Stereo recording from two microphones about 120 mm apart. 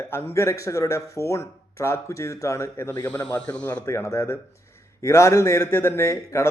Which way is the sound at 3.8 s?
25° left (ahead or behind).